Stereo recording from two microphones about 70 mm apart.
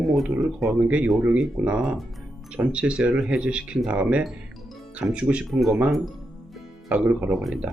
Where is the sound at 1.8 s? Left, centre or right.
Centre.